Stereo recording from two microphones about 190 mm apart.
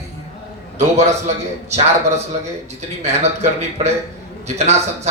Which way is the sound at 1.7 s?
35° right (ahead or behind).